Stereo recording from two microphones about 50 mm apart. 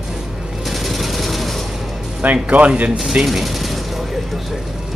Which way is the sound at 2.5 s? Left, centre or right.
Right.